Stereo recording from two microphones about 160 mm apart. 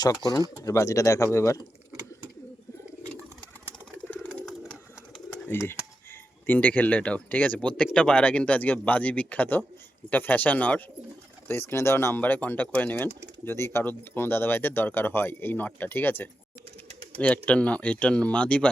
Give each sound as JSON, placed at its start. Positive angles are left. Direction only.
{"t": 0.5, "sound": "speech", "side_deg": 20}
{"t": 4.1, "sound": "pigeon", "side_deg": 10}
{"t": 5.5, "sound": "speech", "side_deg": 15}